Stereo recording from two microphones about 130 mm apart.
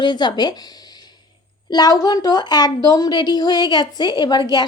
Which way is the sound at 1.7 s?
30° left (ahead or behind).